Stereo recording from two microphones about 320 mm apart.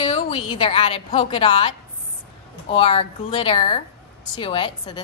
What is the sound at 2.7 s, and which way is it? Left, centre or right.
A woman's voice, centre.